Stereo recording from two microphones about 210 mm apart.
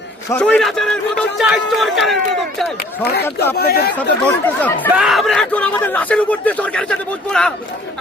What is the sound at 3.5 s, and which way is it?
Speech, 45° left (ahead or behind).